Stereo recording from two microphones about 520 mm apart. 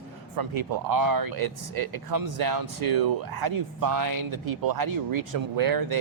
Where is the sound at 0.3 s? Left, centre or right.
Right.